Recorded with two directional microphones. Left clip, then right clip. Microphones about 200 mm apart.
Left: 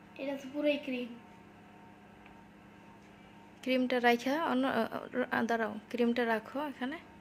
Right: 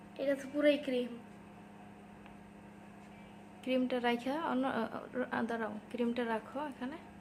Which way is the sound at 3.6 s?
30° left (ahead or behind).